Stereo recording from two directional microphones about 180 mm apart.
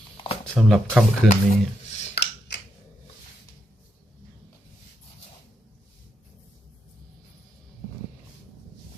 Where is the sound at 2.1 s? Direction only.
75° left (ahead or behind).